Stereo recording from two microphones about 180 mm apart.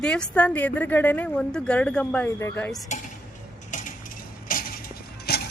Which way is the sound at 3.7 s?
50° left (ahead or behind).